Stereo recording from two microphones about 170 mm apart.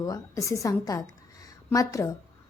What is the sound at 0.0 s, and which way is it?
A woman's voice, 20° left (ahead or behind).